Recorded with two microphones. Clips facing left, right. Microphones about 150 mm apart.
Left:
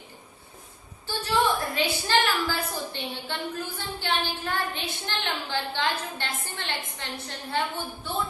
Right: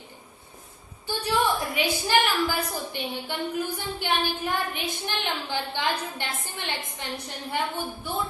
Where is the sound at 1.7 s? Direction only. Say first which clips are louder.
Right 1 dB; 15° right (ahead or behind).